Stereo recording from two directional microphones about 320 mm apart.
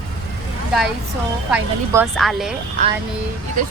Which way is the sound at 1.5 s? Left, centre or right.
Centre.